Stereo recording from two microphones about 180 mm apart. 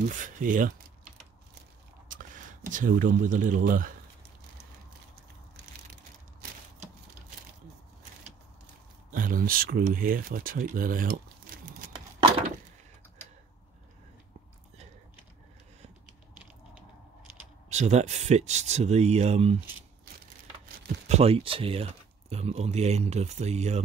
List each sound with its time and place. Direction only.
0.1 s speech: 45° right (ahead or behind)
2.0 s speech: 45° right (ahead or behind)
9.1 s speech: 50° right (ahead or behind)
17.6 s speech: 40° right (ahead or behind)
21.1 s speech: 35° right (ahead or behind)